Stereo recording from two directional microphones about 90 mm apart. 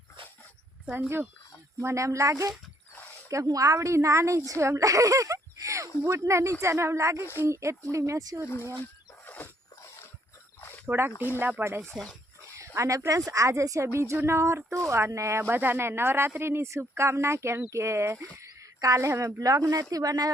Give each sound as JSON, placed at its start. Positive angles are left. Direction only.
{"t": 0.9, "sound": "speech", "side_deg": -20}
{"t": 1.8, "sound": "speech", "side_deg": -35}
{"t": 8.8, "sound": "wild animals", "side_deg": 20}
{"t": 10.8, "sound": "speech", "side_deg": -25}
{"t": 11.1, "sound": "speech", "side_deg": 25}
{"t": 11.3, "sound": "speech", "side_deg": -25}